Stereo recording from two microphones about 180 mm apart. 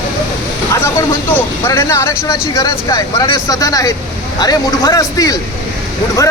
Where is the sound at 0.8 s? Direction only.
15° left (ahead or behind).